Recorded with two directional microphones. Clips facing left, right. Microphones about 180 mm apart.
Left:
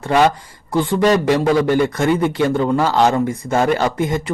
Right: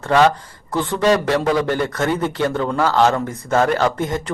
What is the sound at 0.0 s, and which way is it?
A man's voice, 15° left (ahead or behind).